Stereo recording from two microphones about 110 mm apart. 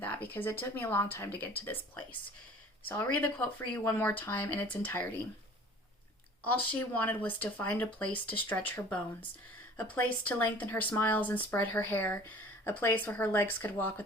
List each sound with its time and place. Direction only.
0.0 s speech: 15° left (ahead or behind)
6.4 s speech: 15° left (ahead or behind)